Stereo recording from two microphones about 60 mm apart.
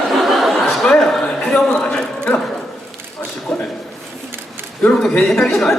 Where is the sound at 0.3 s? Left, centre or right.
Centre.